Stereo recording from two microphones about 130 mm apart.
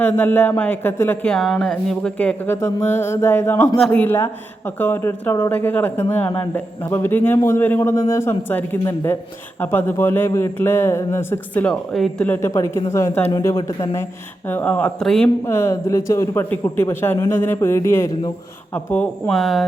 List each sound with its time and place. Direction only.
0.0 s a man's voice: 15° left (ahead or behind)
2.6 s a man's voice: 25° left (ahead or behind); by 12.1 s centre (ahead or behind)
12.2 s a man's voice: 15° left (ahead or behind)
12.5 s speech: 25° left (ahead or behind)
14.4 s a man's voice: 15° left (ahead or behind)
15.4 s a man's voice: 20° left (ahead or behind)
19.3 s speech: centre (ahead or behind)